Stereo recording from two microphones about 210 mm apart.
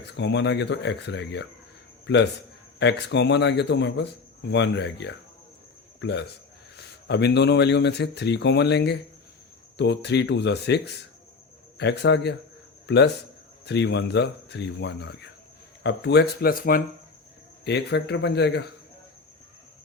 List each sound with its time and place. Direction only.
0.0 s speech: 55° left (ahead or behind)
2.7 s speech: 55° left (ahead or behind)
13.7 s speech: 55° left (ahead or behind)
17.7 s speech: 55° left (ahead or behind)